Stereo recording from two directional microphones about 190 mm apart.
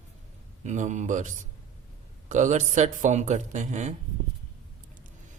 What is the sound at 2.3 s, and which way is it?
A man's voice, 40° right (ahead or behind).